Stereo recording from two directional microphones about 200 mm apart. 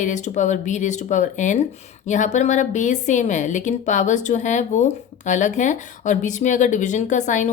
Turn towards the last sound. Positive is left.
turn(degrees=35)  # may be behind; listen again after turning